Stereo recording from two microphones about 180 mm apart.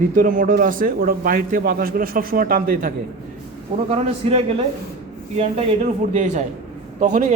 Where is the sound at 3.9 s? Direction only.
35° right (ahead or behind).